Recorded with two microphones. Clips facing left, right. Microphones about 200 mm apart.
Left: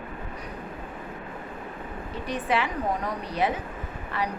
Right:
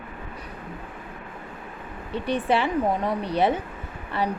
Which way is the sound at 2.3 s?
30° right (ahead or behind).